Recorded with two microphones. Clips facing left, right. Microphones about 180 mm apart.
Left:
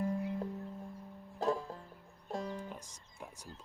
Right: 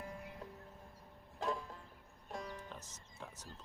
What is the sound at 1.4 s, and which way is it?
Music, 35° left (ahead or behind).